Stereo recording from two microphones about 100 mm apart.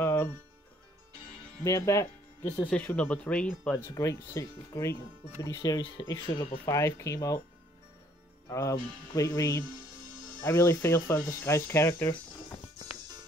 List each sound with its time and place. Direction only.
0.0 s music: 25° left (ahead or behind)
1.6 s speech: 30° left (ahead or behind)
2.4 s speech: 15° left (ahead or behind)
3.7 s speech: 30° left (ahead or behind)
5.8 s speech: 55° left (ahead or behind)
6.0 s speech: 35° left (ahead or behind)
8.5 s speech: 30° left (ahead or behind)